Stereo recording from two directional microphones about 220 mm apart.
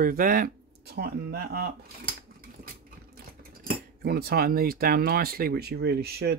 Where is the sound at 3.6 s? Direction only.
45° right (ahead or behind).